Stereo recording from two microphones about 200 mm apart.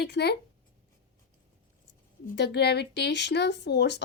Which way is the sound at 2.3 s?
55° left (ahead or behind).